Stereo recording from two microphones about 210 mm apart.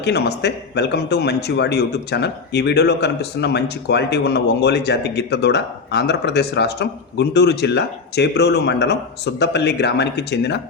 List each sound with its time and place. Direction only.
0.0 s speech: 50° left (ahead or behind)